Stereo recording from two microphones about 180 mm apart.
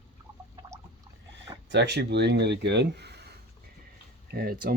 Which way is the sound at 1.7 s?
70° right (ahead or behind).